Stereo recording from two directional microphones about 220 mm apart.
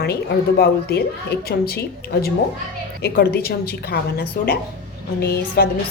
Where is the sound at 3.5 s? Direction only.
45° left (ahead or behind).